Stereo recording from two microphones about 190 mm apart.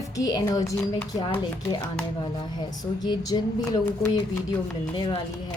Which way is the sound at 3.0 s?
20° left (ahead or behind).